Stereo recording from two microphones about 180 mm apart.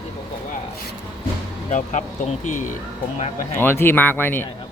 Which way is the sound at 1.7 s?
45° left (ahead or behind).